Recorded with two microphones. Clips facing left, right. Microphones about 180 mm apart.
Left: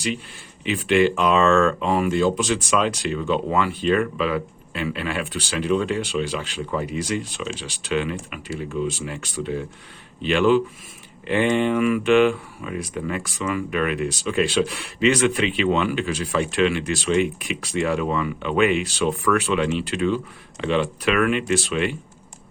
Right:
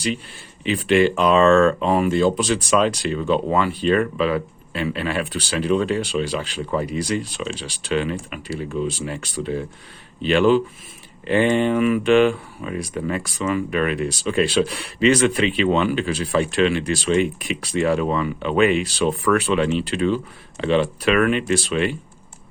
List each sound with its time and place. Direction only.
0.6 s speech: 35° right (ahead or behind)